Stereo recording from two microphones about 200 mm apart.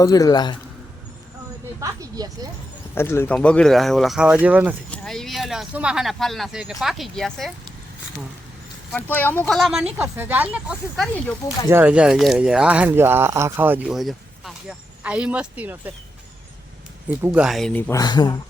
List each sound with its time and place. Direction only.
0.0 s a man's voice: 15° left (ahead or behind)
1.8 s speech: 15° right (ahead or behind)
2.9 s speech: 10° left (ahead or behind)
8.9 s speech: 10° left (ahead or behind)
11.7 s speech: 10° right (ahead or behind)
17.1 s speech: 5° right (ahead or behind); by 18.0 s 10° left (ahead or behind)
18.0 s a man's voice: 20° left (ahead or behind)